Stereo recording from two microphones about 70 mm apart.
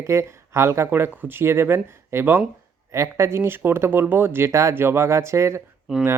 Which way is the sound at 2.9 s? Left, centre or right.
Right.